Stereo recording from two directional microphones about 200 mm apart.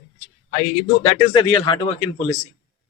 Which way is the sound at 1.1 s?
25° left (ahead or behind).